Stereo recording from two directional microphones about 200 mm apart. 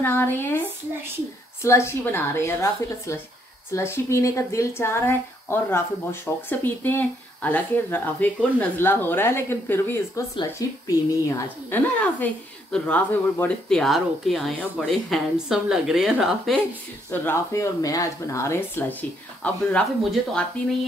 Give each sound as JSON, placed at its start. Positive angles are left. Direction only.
{"t": 0.0, "sound": "speech", "side_deg": 10}
{"t": 17.1, "sound": "speech", "side_deg": 10}